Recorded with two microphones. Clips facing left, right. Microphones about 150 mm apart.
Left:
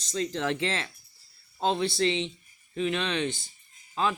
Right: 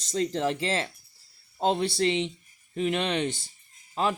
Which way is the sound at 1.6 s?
50° right (ahead or behind).